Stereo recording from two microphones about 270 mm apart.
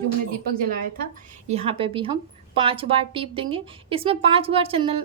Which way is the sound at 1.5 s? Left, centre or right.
Right.